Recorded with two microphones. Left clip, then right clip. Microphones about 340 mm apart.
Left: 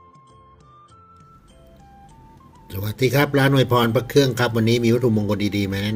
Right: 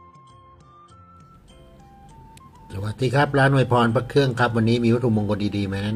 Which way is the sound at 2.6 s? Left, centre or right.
Centre.